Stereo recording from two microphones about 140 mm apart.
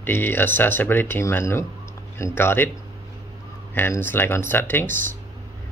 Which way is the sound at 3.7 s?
15° left (ahead or behind).